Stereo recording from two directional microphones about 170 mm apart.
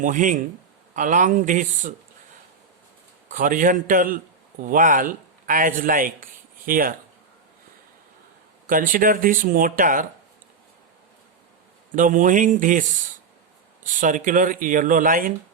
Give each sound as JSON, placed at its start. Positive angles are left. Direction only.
{"t": 0.0, "sound": "speech", "side_deg": -50}
{"t": 3.2, "sound": "speech", "side_deg": -50}
{"t": 8.6, "sound": "speech", "side_deg": -55}
{"t": 11.9, "sound": "speech", "side_deg": -50}